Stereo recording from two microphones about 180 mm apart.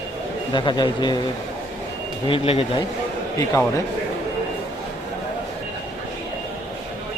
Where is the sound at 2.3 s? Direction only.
30° left (ahead or behind).